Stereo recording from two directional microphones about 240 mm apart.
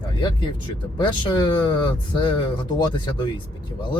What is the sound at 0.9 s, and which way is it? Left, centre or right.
Speech, centre.